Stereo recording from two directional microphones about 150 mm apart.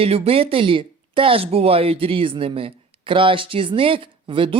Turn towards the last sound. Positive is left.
turn(degrees=-35)  # may be behind; listen again after turning